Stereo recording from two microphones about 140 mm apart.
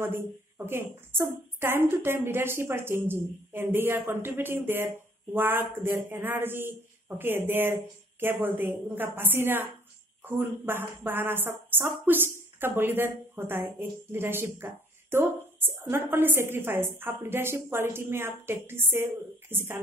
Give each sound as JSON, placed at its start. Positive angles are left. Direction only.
{"t": 0.7, "sound": "a woman's voice", "side_deg": -15}